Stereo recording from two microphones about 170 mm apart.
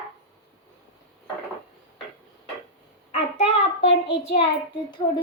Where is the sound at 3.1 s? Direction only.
40° left (ahead or behind).